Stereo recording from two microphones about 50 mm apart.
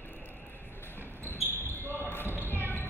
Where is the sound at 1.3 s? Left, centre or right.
Left.